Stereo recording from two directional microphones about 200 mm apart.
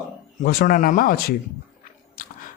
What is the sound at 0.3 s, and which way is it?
Speech, 45° left (ahead or behind).